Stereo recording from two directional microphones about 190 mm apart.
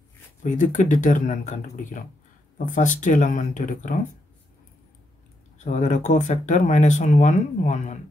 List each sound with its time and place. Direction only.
0.4 s speech: 40° left (ahead or behind)
5.6 s speech: 40° left (ahead or behind)